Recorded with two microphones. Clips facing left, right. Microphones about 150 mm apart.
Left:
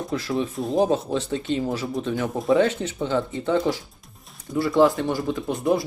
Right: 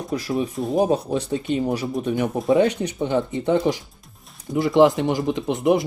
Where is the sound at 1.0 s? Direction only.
15° right (ahead or behind).